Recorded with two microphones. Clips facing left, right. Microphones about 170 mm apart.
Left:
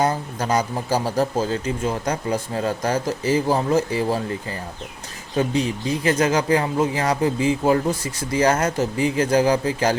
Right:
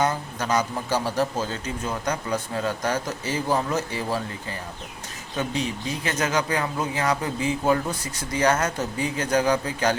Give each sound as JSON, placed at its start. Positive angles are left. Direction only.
{"t": 0.0, "sound": "speech", "side_deg": 35}
{"t": 6.0, "sound": "speech", "side_deg": 30}